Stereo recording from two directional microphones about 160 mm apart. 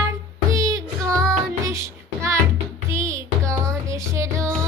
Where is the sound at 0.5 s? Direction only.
20° right (ahead or behind).